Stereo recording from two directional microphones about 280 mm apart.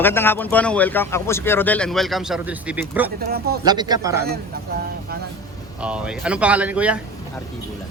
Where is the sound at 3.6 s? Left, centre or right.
Centre.